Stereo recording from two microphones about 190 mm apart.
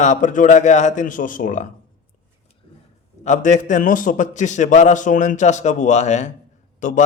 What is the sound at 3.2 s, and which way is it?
A man's voice, 40° left (ahead or behind).